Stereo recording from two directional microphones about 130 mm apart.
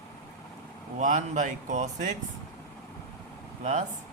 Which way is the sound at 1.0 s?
75° right (ahead or behind).